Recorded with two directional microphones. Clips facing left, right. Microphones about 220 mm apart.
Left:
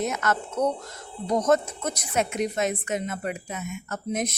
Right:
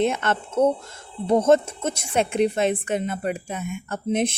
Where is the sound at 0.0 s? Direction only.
30° right (ahead or behind).